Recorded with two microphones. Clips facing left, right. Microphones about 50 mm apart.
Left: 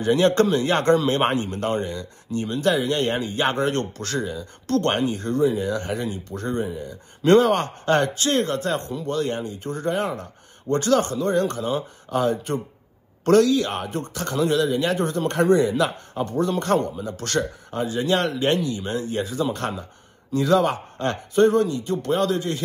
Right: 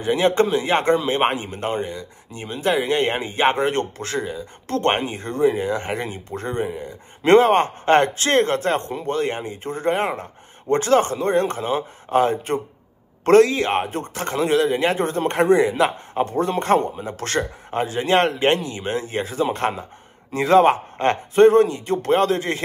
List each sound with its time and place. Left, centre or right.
0.0 s a man's voice: centre; by 22.6 s right